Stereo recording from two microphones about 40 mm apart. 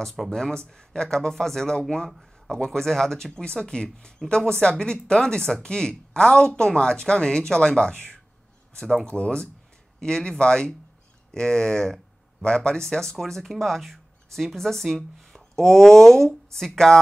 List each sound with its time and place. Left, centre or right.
0.3 s speech: centre
2.0 s speech: centre
2.5 s speech: centre
9.0 s speech: left
9.9 s speech: centre